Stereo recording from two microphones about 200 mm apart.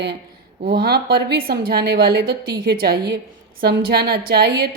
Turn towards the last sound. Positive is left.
turn(degrees=-50)  # may be behind; listen again after turning